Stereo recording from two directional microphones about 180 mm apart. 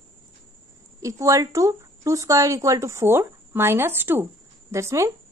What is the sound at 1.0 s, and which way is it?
Speech, 15° right (ahead or behind).